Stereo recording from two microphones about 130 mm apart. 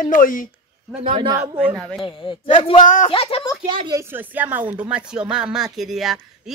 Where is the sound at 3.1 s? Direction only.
45° left (ahead or behind).